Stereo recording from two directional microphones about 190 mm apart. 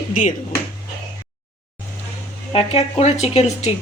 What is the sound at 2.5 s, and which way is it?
Speech, 30° left (ahead or behind).